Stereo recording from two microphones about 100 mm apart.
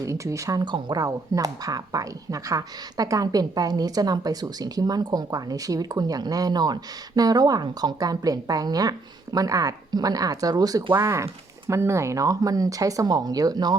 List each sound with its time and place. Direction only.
0.0 s speech: 35° right (ahead or behind)
0.6 s speech: 50° right (ahead or behind)
1.0 s speech: 35° right (ahead or behind)
10.9 s speech: 30° right (ahead or behind)